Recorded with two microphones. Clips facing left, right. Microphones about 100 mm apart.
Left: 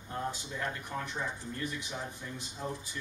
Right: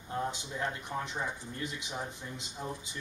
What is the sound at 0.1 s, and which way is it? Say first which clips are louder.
Speech: right 2 dB; 20° right (ahead or behind).